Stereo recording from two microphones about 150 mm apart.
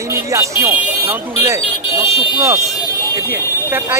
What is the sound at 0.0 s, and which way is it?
Speech, 20° right (ahead or behind).